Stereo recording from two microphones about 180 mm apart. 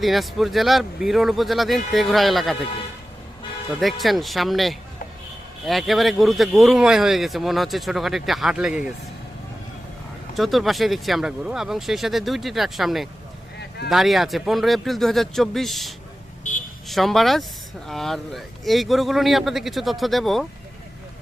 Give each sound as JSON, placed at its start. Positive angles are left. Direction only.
{"t": 0.0, "sound": "speech", "side_deg": 0}
{"t": 3.8, "sound": "speech", "side_deg": 0}
{"t": 10.3, "sound": "speech", "side_deg": 0}
{"t": 13.6, "sound": "a sound", "side_deg": 65}
{"t": 13.9, "sound": "speech", "side_deg": 0}
{"t": 16.4, "sound": "buzzer", "side_deg": 45}
{"t": 16.9, "sound": "speech", "side_deg": 0}